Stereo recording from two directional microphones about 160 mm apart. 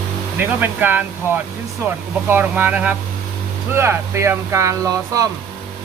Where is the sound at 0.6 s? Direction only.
10° right (ahead or behind).